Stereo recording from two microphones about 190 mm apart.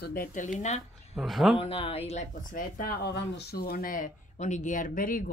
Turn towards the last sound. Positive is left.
turn(degrees=45)  # may be behind; listen again after turning